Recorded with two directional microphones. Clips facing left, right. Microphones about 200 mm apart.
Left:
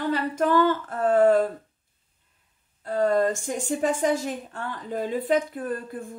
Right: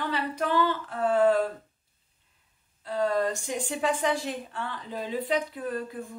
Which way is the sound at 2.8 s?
50° left (ahead or behind).